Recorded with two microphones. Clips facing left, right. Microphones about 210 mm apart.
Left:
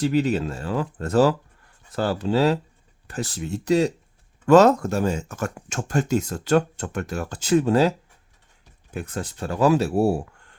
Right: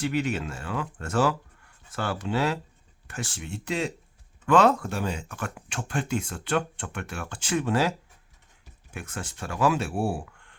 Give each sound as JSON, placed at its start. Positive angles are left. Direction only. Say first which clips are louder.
{"t": 0.0, "sound": "speech", "louder": "left 6 dB", "side_deg": 35}